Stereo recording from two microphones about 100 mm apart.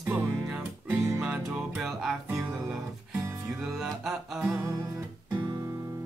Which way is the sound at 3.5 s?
Centre (ahead or behind).